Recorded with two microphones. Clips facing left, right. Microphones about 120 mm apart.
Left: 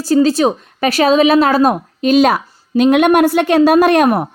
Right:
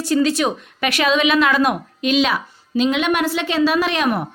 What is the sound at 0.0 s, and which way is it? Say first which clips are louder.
A woman's voice: left 6 dB; 35° left (ahead or behind).